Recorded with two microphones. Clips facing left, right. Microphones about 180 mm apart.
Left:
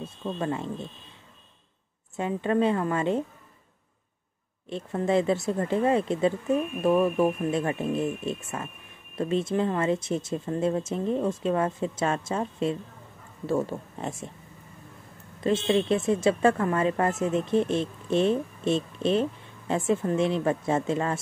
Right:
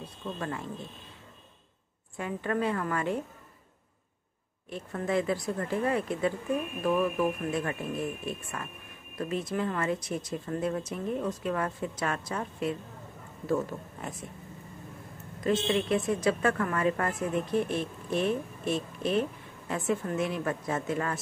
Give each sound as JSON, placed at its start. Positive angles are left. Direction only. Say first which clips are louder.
{"t": 0.0, "sound": "speech", "louder": "left 5 dB", "side_deg": 25}
{"t": 2.1, "sound": "a woman's voice", "louder": "left 6 dB", "side_deg": 25}
{"t": 4.6, "sound": "a woman's voice", "louder": "left 5 dB", "side_deg": 25}
{"t": 15.4, "sound": "a woman's voice", "louder": "left 4 dB", "side_deg": 25}